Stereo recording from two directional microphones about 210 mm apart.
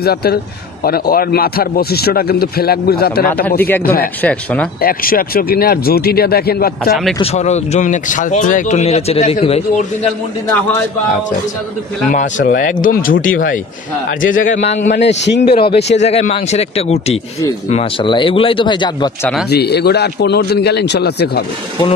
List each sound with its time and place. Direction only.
0.0 s a man's voice: 50° left (ahead or behind)
3.6 s speech: 10° left (ahead or behind)
4.8 s a man's voice: 45° left (ahead or behind)
7.2 s speech: 30° left (ahead or behind)
12.1 s speech: 40° left (ahead or behind)
15.0 s speech: 55° left (ahead or behind)
15.6 s speech: 30° left (ahead or behind)
19.5 s a man's voice: 50° left (ahead or behind)